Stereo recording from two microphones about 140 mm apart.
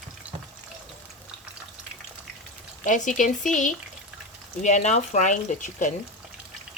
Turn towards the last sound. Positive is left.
turn(degrees=65)  # may be behind; listen again after turning